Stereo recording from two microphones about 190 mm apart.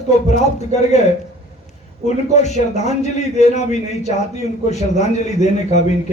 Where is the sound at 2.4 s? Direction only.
35° left (ahead or behind).